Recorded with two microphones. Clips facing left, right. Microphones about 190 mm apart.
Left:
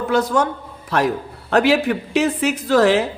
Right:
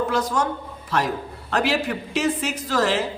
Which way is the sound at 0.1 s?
60° left (ahead or behind).